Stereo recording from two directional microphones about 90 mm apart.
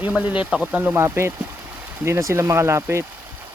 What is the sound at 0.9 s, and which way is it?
Speech, 30° right (ahead or behind).